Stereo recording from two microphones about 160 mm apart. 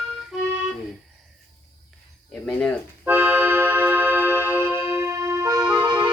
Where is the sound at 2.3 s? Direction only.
5° left (ahead or behind).